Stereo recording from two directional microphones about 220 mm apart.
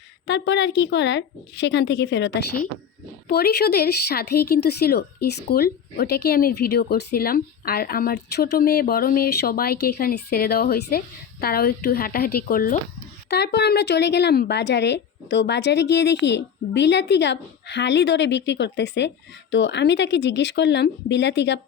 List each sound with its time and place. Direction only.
0.3 s a woman's voice: 55° left (ahead or behind)